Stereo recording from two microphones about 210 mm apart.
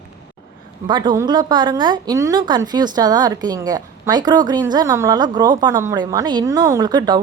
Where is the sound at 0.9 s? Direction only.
20° right (ahead or behind).